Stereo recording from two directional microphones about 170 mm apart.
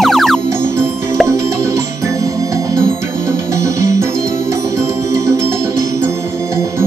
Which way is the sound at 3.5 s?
15° right (ahead or behind).